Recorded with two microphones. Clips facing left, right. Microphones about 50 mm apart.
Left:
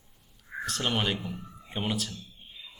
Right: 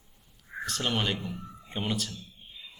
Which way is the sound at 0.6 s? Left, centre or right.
Centre.